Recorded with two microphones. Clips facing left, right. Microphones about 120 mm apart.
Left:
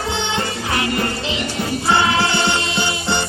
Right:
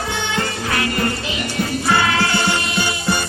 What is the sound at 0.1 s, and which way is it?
Music, 25° left (ahead or behind).